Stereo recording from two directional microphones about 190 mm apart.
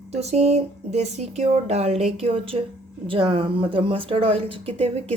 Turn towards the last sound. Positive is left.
turn(degrees=-30)  # may be behind; listen again after turning